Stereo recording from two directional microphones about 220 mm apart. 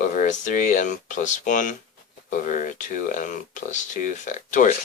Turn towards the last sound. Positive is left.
turn(degrees=35)  # may be behind; listen again after turning